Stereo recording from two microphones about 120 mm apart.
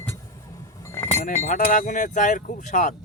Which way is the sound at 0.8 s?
25° left (ahead or behind).